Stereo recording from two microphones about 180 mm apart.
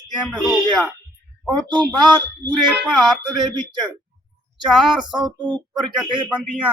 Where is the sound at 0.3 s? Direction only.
Centre (ahead or behind).